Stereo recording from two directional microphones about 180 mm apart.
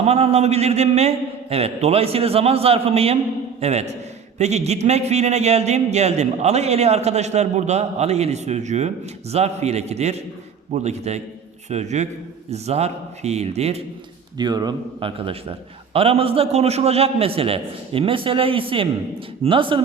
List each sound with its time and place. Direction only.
0.0 s speech: 35° right (ahead or behind)
14.3 s speech: 25° right (ahead or behind)